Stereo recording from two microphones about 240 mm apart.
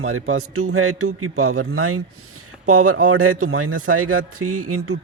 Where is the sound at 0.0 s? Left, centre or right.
Right.